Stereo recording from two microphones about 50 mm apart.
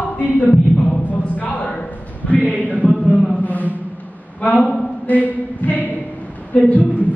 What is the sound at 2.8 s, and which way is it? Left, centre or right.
Chant, left.